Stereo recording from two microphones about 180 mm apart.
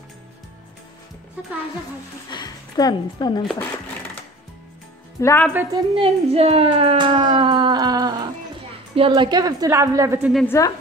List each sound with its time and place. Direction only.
2.3 s a woman's voice: 20° left (ahead or behind)
5.2 s a woman's voice: 10° left (ahead or behind)
5.5 s a woman's voice: 10° right (ahead or behind)
5.8 s speech: 30° right (ahead or behind)
10.3 s a woman's voice: 10° left (ahead or behind)